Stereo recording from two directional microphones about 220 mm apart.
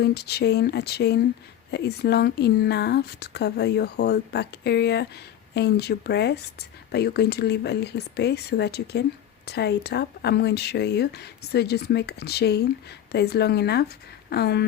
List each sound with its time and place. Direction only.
0.0 s speech: 45° left (ahead or behind)